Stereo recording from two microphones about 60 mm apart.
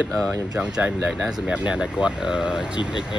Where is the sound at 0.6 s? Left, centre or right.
Centre.